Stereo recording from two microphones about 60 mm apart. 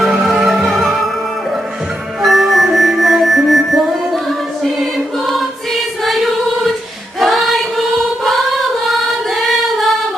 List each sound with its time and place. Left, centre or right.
0.2 s music: centre
2.2 s music: centre
4.6 s choir: centre